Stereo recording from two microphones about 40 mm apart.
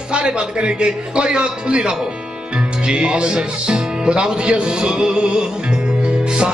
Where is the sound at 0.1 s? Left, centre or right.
Right.